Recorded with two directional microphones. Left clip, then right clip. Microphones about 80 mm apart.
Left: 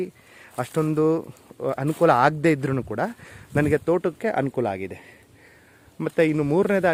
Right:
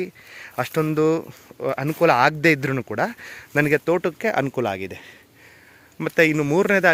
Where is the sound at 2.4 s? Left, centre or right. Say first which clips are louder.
Right 3 dB; left; by 6.5 s centre.